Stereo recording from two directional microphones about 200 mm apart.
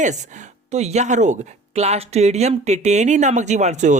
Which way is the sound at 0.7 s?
35° right (ahead or behind).